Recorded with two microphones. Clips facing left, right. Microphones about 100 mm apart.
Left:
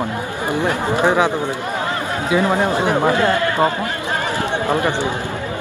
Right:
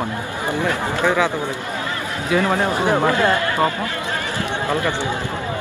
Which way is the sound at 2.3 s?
20° left (ahead or behind).